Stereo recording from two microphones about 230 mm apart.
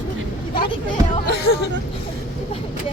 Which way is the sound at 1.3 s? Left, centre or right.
Left.